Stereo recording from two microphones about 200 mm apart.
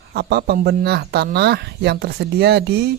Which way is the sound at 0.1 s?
55° right (ahead or behind).